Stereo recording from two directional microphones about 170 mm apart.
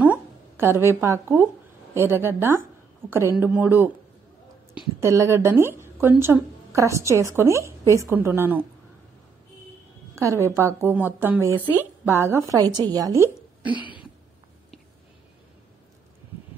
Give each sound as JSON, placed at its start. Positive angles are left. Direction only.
{"t": 0.0, "sound": "a sound", "side_deg": -10}
{"t": 2.0, "sound": "a woman's voice", "side_deg": -15}
{"t": 5.0, "sound": "a woman's voice", "side_deg": -15}
{"t": 10.1, "sound": "a woman's voice", "side_deg": -15}
{"t": 13.7, "sound": "cough", "side_deg": 30}